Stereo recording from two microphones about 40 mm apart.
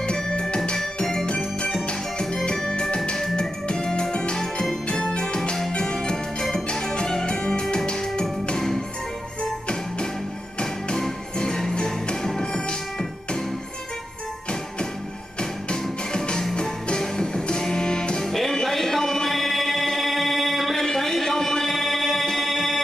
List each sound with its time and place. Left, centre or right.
0.0 s music: left
2.7 s organ: left
3.7 s music: centre
10.6 s music: centre
15.7 s music: centre
18.2 s music: centre
20.7 s a sound: centre
22.4 s music: centre